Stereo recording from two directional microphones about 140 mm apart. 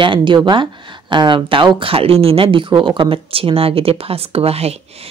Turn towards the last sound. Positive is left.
turn(degrees=-45)  # may be behind; listen again after turning